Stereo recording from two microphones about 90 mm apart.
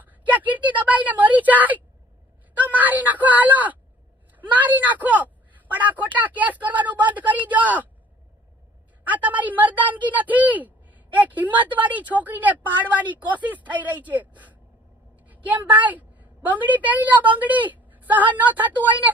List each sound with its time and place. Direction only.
0.0 s a woman's voice: 20° right (ahead or behind)
9.0 s a woman's voice: 20° right (ahead or behind)
15.1 s a sound: 20° right (ahead or behind)
15.4 s a woman's voice: 15° right (ahead or behind)